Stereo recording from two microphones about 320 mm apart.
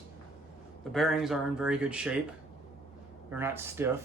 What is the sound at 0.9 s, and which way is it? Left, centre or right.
Speech, centre.